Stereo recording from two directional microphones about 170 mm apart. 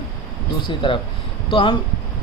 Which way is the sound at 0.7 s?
30° left (ahead or behind).